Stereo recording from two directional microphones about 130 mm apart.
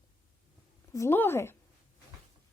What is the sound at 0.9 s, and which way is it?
Speech, 20° left (ahead or behind).